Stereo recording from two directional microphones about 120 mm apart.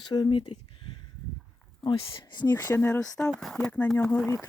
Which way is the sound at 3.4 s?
5° left (ahead or behind).